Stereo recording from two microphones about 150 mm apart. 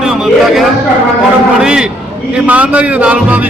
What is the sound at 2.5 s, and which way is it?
Speech, 10° right (ahead or behind).